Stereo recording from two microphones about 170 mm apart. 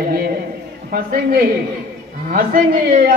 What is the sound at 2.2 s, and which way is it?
Speech, 55° right (ahead or behind).